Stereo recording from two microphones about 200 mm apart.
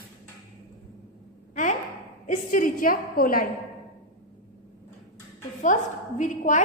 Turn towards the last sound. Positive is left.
turn(degrees=40)  # may be behind; listen again after turning